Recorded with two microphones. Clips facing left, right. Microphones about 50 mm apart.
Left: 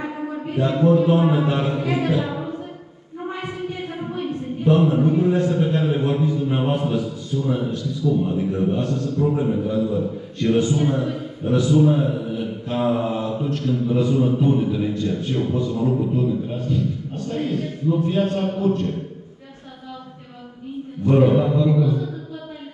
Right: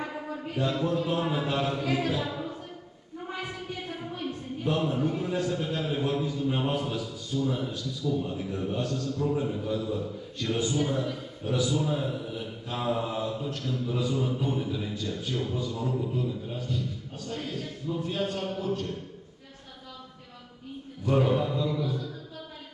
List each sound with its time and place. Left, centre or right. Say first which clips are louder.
0.0 s a man's voice: left 7 dB; left
21.0 s mantra: left 8 dB; left